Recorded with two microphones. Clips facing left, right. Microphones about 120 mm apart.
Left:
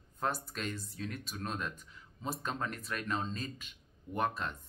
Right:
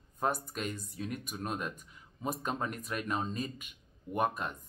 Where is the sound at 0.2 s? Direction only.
10° right (ahead or behind).